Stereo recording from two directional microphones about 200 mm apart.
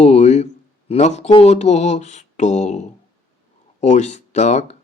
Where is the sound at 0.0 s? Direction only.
35° left (ahead or behind).